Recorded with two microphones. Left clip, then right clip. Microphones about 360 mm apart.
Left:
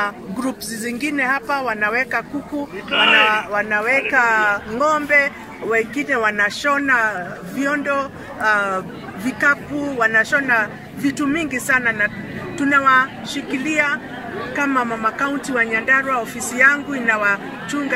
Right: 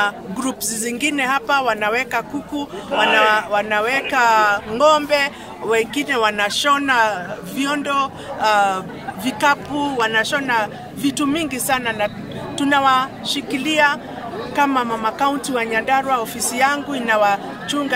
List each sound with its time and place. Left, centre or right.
0.0 s speech: centre
3.3 s speech: centre